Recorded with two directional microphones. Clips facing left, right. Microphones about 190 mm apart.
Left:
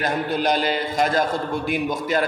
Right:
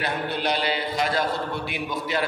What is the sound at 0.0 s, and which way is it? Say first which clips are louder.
A man's voice: left 4 dB; 45° left (ahead or behind).